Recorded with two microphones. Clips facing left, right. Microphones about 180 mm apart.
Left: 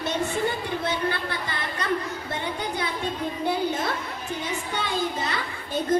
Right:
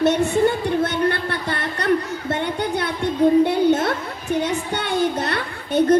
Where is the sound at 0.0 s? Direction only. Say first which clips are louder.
Right 9 dB; 70° right (ahead or behind).